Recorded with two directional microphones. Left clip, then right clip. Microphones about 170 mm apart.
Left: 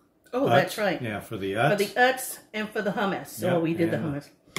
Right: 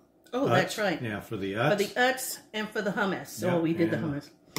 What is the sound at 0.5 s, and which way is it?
Speech, 15° right (ahead or behind).